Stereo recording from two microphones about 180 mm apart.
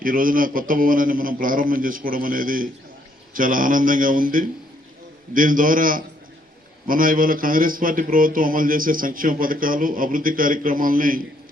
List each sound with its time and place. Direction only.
0.0 s speech: 50° right (ahead or behind)